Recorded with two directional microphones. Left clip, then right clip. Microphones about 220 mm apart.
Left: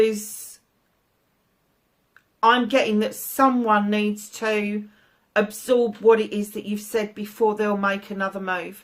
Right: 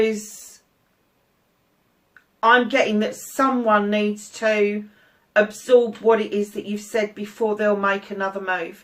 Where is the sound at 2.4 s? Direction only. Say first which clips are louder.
Right 2 dB; 45° left (ahead or behind).